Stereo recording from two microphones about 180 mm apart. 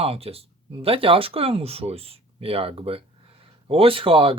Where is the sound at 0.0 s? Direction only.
35° right (ahead or behind).